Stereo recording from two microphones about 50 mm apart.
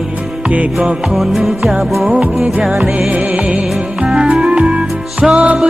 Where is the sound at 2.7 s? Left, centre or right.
Right.